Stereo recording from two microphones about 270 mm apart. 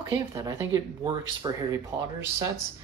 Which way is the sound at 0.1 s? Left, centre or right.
Centre.